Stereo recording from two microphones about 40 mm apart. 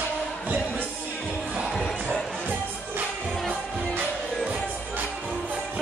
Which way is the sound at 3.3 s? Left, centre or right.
Centre.